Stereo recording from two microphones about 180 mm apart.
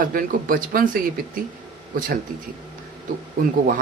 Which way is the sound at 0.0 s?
50° right (ahead or behind).